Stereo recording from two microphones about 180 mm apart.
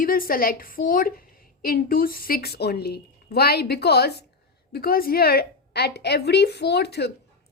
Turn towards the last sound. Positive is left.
turn(degrees=65)  # may be behind; listen again after turning